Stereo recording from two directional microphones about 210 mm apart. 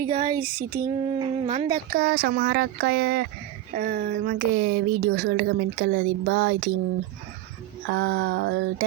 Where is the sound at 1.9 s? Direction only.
45° right (ahead or behind).